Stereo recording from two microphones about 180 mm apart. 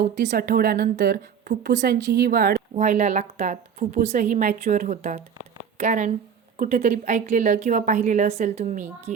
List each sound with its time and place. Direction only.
0.2 s a woman's voice: 50° right (ahead or behind)
2.7 s a woman's voice: 40° right (ahead or behind)